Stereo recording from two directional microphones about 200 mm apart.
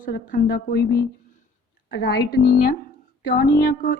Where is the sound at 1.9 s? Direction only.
55° left (ahead or behind).